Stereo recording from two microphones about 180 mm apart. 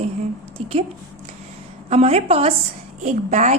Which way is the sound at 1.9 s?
35° right (ahead or behind).